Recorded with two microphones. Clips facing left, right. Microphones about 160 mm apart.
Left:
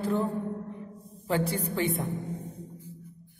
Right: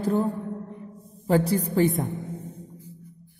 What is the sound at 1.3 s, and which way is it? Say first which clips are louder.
Speech: right 6 dB; 40° right (ahead or behind).